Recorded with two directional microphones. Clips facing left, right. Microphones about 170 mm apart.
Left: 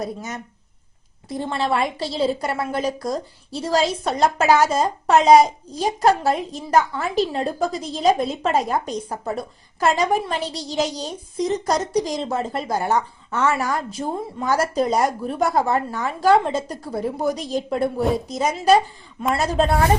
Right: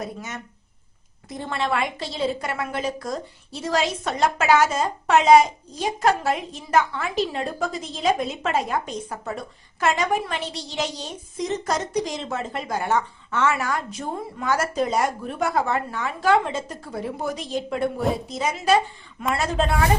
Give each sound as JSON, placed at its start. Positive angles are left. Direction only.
{"t": 0.0, "sound": "a woman's voice", "side_deg": 35}